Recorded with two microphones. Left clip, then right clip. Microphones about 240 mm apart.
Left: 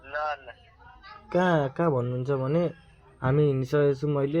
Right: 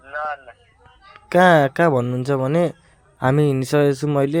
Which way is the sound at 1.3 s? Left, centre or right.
Right.